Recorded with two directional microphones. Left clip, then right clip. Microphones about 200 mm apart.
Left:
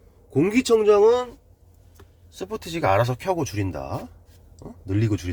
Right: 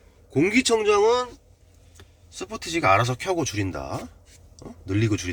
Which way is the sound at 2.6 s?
20° left (ahead or behind).